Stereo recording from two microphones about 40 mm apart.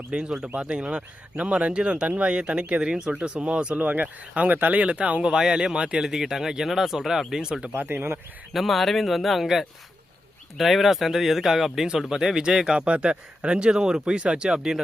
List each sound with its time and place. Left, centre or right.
0.1 s speech: right
3.1 s speech: right
3.8 s speech: right
4.9 s speech: right
5.2 s speech: centre
6.0 s speech: centre
7.8 s speech: right
8.5 s speech: centre
10.6 s speech: centre
12.7 s speech: right